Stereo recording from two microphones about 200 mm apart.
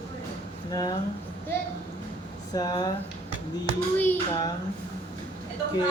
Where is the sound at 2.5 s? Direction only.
20° left (ahead or behind).